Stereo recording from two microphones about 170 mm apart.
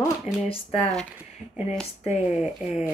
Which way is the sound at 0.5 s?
35° left (ahead or behind).